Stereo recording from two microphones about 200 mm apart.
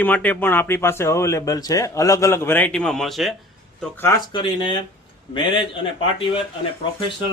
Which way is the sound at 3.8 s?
10° left (ahead or behind).